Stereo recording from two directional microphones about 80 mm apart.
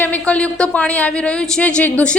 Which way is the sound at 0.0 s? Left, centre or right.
Centre.